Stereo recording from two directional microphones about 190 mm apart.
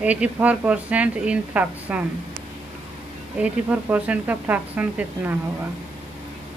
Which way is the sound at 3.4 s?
10° right (ahead or behind).